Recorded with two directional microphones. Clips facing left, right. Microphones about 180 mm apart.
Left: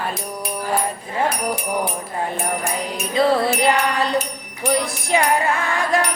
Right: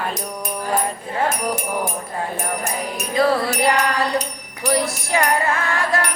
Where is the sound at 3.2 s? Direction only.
25° left (ahead or behind).